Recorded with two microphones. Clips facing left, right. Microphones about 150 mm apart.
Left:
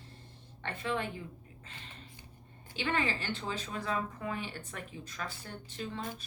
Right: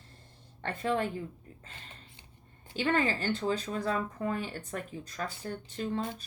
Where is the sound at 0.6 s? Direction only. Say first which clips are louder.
Right 5 dB; 40° right (ahead or behind).